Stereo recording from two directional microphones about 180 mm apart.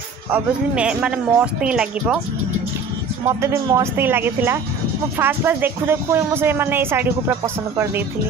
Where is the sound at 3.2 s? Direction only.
15° right (ahead or behind).